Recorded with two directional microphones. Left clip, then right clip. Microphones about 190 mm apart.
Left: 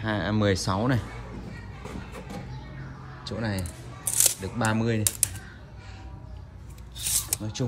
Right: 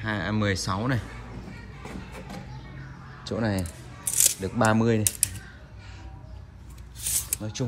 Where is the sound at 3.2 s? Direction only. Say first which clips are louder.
Right 4 dB; centre (ahead or behind).